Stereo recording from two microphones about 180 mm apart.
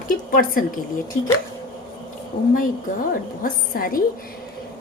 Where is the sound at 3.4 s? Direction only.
55° left (ahead or behind).